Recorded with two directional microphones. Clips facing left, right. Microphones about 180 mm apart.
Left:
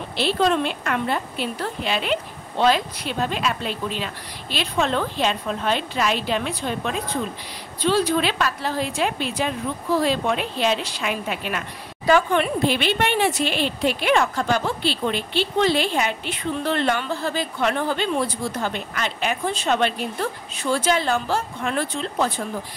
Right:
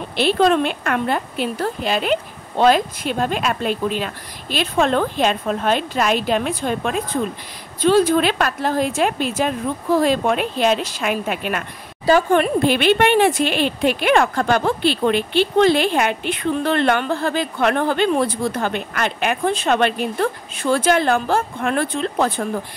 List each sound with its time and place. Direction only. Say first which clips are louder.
0.2 s a woman's voice: right 4 dB; 55° right (ahead or behind)